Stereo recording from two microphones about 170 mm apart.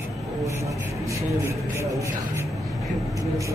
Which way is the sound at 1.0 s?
15° right (ahead or behind).